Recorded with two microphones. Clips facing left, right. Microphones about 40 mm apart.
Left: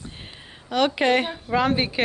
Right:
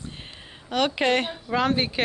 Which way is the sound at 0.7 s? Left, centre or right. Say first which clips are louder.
Left 2 dB; centre.